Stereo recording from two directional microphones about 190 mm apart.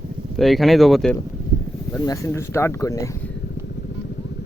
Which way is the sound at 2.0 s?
15° left (ahead or behind).